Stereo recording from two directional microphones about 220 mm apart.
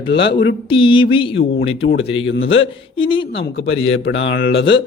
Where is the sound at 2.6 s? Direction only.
25° left (ahead or behind).